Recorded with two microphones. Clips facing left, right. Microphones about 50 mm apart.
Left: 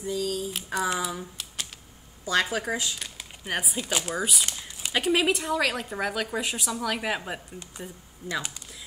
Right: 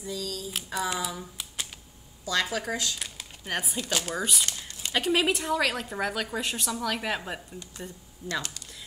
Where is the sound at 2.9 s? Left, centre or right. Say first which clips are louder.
Even; centre.